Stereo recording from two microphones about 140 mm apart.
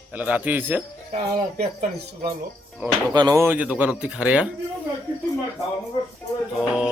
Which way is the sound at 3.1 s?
30° right (ahead or behind).